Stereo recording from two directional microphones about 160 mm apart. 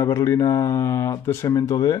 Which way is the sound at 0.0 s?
20° left (ahead or behind).